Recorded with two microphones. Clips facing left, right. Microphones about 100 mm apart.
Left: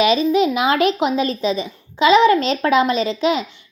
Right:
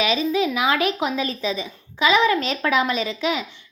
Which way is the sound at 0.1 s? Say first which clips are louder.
Left 5 dB; 25° left (ahead or behind).